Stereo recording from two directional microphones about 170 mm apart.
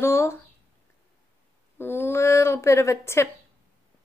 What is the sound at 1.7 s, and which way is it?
Speech, 15° left (ahead or behind).